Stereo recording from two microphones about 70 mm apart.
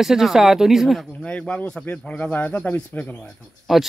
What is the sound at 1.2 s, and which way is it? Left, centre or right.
Speech, centre.